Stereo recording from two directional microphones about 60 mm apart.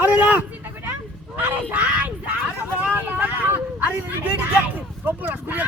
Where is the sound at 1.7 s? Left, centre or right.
Right.